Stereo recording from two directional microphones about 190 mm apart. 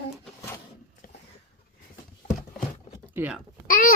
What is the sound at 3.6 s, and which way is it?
Babbling, 50° left (ahead or behind).